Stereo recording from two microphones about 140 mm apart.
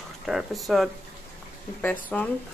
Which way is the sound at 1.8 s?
10° left (ahead or behind).